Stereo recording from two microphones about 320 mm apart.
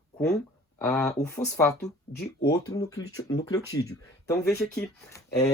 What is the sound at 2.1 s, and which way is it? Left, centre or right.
Speech, left.